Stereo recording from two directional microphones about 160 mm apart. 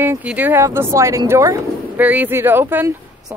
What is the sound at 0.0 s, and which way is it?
Speech, 10° right (ahead or behind).